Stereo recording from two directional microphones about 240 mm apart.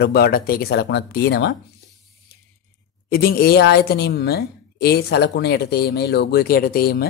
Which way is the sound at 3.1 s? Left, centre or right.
Left.